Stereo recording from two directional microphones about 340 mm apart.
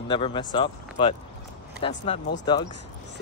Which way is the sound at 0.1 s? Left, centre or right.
Centre.